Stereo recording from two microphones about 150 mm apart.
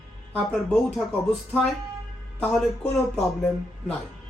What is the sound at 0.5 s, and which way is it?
Speech, 5° left (ahead or behind).